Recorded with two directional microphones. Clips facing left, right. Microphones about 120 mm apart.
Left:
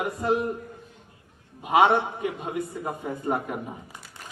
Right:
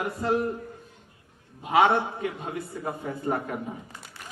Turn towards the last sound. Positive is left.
turn(degrees=15)  # may be behind; listen again after turning